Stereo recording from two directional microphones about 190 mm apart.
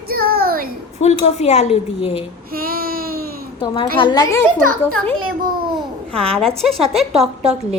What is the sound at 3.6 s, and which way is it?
Speech, 25° left (ahead or behind).